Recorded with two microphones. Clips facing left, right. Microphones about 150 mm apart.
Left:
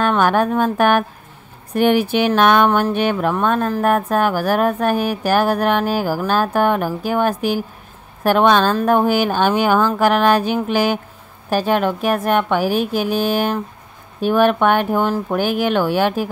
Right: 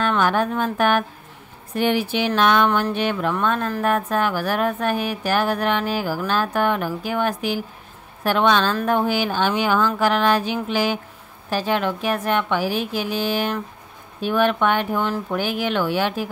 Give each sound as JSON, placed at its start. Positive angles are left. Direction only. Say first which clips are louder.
{"t": 0.0, "sound": "speech", "louder": "left 4 dB", "side_deg": 50}